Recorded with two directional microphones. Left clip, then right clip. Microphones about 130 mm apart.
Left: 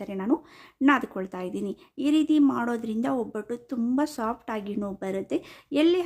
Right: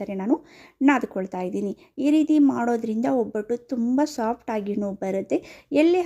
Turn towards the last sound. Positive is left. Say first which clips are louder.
# right 3 dB
turn(degrees=-25)  # may be behind; listen again after turning